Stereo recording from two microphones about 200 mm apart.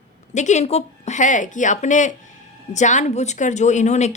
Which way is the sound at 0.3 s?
35° left (ahead or behind).